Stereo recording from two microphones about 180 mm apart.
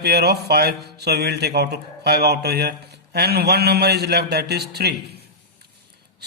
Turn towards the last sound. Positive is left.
turn(degrees=-65)  # may be behind; listen again after turning